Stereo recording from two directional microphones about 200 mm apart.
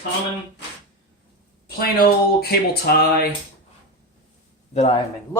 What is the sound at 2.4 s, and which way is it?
Speech, 50° left (ahead or behind).